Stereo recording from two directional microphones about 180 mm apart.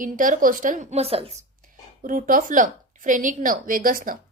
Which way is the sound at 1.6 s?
50° right (ahead or behind).